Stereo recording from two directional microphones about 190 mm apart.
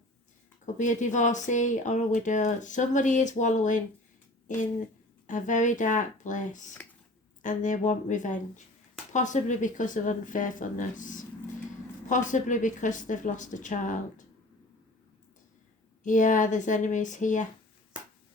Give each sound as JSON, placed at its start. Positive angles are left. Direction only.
{"t": 0.6, "sound": "speech", "side_deg": 40}
{"t": 16.0, "sound": "speech", "side_deg": 40}